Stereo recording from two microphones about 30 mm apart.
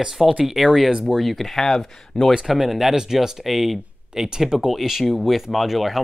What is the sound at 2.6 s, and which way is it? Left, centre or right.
Speech, centre.